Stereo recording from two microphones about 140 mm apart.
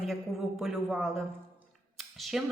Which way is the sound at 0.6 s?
Centre (ahead or behind).